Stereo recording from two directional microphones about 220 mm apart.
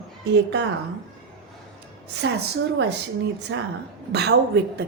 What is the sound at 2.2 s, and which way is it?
A woman's voice, 50° right (ahead or behind).